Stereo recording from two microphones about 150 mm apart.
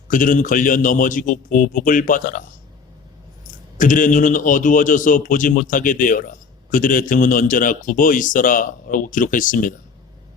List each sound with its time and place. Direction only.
0.1 s a man's voice: 60° left (ahead or behind)
3.8 s a man's voice: 60° left (ahead or behind)